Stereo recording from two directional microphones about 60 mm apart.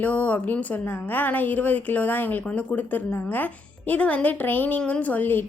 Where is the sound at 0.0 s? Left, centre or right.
Left.